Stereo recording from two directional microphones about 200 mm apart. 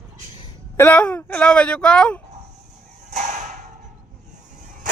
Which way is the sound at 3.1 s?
35° right (ahead or behind).